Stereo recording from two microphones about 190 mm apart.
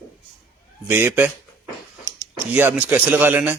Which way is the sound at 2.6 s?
10° right (ahead or behind).